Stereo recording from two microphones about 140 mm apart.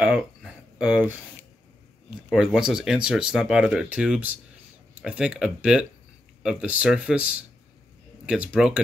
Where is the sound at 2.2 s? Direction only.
5° right (ahead or behind).